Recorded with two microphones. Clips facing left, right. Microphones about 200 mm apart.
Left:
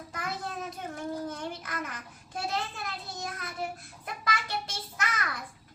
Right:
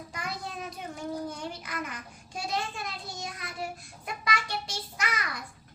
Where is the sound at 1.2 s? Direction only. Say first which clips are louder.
Even; centre (ahead or behind).